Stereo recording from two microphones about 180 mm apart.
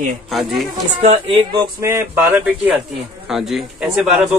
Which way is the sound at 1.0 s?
35° right (ahead or behind).